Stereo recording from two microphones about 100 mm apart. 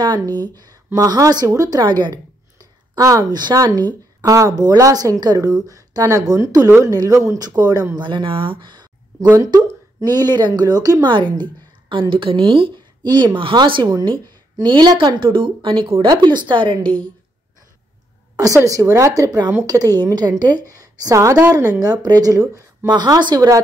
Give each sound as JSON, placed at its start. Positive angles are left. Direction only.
{"t": 0.9, "sound": "speech", "side_deg": -40}
{"t": 1.9, "sound": "a woman's voice", "side_deg": -50}
{"t": 2.9, "sound": "speech", "side_deg": -35}
{"t": 9.4, "sound": "a woman's voice", "side_deg": -40}
{"t": 13.0, "sound": "a woman's voice", "side_deg": -50}
{"t": 16.8, "sound": "speech", "side_deg": 10}
{"t": 18.6, "sound": "a woman's voice", "side_deg": -35}